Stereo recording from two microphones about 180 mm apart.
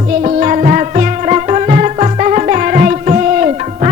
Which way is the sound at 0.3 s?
40° right (ahead or behind).